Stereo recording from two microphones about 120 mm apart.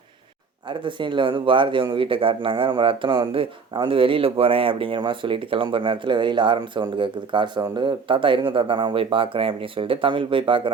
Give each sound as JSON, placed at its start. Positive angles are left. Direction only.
{"t": 0.7, "sound": "speech", "side_deg": -40}